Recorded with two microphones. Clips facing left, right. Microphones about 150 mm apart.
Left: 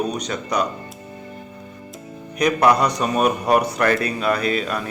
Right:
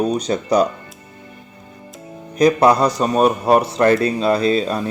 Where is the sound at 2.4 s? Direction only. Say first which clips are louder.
Right 4 dB; 30° right (ahead or behind).